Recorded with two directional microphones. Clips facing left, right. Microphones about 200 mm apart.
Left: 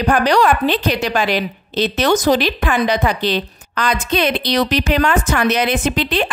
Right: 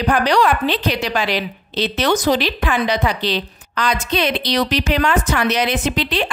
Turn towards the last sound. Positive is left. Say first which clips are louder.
# left 2 dB
turn(degrees=50)  # may be behind; listen again after turning